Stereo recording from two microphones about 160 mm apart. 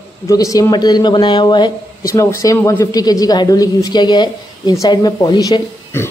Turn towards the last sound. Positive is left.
turn(degrees=20)  # may be behind; listen again after turning